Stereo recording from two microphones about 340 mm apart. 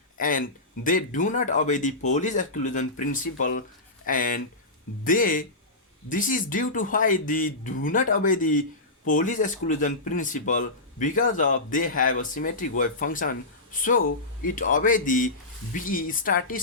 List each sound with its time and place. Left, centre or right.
0.2 s speech: left